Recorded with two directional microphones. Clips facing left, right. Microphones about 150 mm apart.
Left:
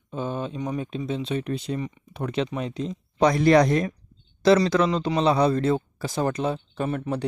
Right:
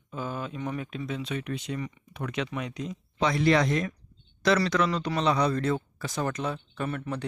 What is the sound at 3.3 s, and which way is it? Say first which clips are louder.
Speech: left 5 dB; 40° left (ahead or behind).